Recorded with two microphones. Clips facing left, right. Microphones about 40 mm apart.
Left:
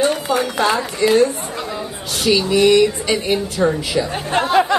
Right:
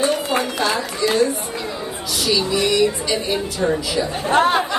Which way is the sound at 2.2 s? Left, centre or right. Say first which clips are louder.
Left 6 dB; left.